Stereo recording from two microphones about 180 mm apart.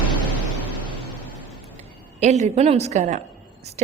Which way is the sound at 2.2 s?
40° right (ahead or behind).